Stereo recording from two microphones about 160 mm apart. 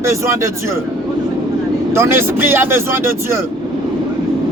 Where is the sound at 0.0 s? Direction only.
20° right (ahead or behind).